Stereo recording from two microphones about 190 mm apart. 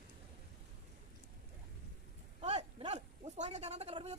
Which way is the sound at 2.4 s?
35° right (ahead or behind).